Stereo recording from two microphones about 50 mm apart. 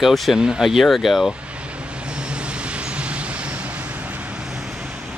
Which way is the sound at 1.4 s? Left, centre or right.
Right.